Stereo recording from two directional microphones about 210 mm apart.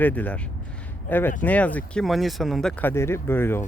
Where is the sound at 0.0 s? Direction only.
5° left (ahead or behind).